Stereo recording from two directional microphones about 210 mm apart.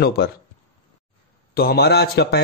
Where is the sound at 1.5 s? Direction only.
50° left (ahead or behind).